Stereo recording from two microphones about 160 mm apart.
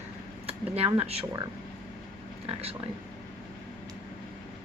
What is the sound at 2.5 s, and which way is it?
Speech, 40° right (ahead or behind).